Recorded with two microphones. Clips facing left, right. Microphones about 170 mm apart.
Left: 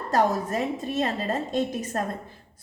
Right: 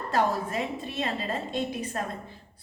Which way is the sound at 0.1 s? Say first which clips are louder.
Left 3 dB; 40° left (ahead or behind).